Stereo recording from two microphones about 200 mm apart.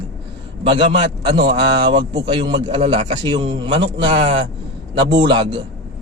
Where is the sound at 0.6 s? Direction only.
25° right (ahead or behind).